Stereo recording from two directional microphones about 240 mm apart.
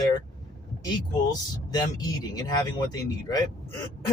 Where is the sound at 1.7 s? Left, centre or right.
Centre.